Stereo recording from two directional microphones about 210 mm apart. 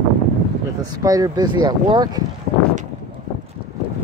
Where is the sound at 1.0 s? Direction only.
15° right (ahead or behind).